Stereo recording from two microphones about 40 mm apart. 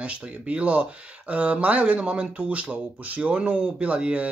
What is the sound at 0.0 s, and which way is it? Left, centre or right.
Speech, right.